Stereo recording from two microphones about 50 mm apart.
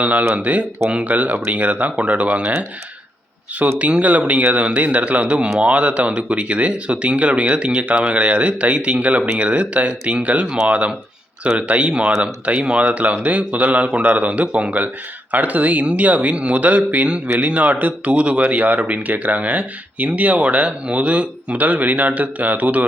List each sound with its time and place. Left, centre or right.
0.0 s speech: right
3.8 s speech: right
10.4 s speech: centre
10.7 s speech: right